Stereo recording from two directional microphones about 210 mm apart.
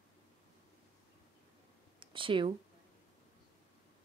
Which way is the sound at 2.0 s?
25° right (ahead or behind).